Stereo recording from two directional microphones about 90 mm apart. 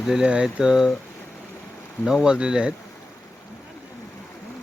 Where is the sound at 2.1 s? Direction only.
5° right (ahead or behind).